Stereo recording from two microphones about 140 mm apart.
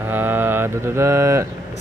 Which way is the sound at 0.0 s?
15° right (ahead or behind).